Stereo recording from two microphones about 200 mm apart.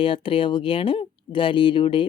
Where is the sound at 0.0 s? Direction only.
25° left (ahead or behind).